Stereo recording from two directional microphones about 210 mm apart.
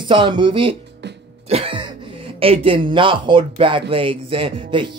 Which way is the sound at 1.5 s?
25° right (ahead or behind).